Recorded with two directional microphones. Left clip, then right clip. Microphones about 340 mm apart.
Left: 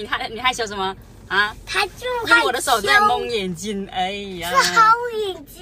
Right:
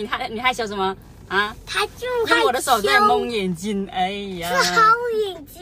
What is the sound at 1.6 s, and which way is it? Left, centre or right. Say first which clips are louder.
Speech: left 1 dB; centre.